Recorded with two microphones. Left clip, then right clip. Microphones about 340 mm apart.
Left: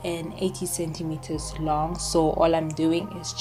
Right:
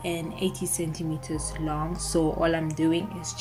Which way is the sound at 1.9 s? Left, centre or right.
Centre.